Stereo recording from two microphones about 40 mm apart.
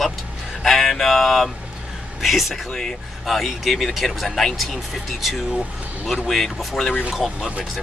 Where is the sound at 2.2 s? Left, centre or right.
Centre.